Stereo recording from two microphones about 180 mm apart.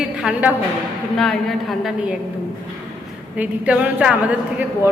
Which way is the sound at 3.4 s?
5° right (ahead or behind).